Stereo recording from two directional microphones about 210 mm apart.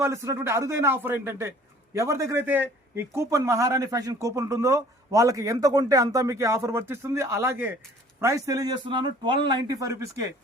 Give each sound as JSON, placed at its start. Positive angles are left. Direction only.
{"t": 0.0, "sound": "a man's voice", "side_deg": -15}